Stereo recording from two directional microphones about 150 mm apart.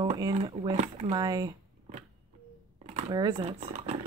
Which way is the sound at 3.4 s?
40° right (ahead or behind).